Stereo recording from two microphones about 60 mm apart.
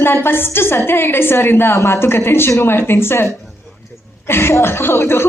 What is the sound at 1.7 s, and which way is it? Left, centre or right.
A woman's voice, left.